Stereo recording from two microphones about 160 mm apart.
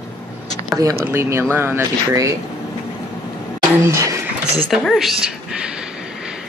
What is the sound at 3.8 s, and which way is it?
Speech, 20° right (ahead or behind).